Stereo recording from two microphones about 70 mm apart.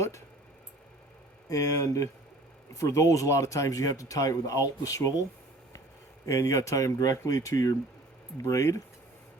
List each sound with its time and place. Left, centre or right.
1.5 s speech: left
6.2 s speech: left